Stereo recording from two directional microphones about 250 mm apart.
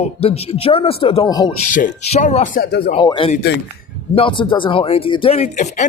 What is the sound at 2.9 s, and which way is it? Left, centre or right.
A man's voice, centre.